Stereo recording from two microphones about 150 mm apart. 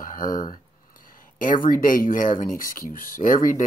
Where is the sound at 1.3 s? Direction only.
65° left (ahead or behind).